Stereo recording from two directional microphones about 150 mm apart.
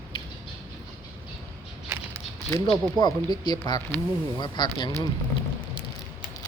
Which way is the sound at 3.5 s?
25° left (ahead or behind).